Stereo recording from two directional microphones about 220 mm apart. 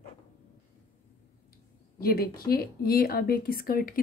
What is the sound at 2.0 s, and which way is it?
A woman's voice, 45° left (ahead or behind).